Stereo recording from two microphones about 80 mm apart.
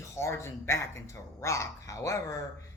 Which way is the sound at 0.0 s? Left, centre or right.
Left.